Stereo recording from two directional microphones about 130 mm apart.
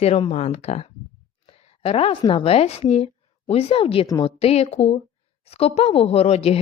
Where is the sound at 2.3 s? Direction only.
45° left (ahead or behind).